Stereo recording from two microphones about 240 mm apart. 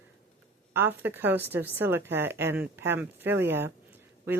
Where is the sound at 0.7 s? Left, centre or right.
Centre.